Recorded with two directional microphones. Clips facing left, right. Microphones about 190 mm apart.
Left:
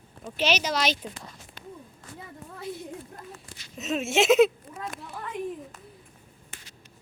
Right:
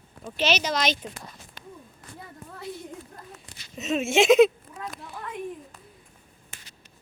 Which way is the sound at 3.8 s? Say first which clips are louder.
Right 3 dB; centre (ahead or behind).